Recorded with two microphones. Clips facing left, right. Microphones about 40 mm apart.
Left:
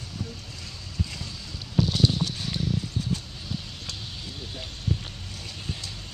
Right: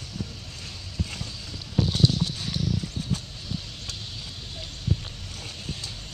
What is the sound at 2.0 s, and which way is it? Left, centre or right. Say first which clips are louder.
Clip-clop: right 1 dB; centre.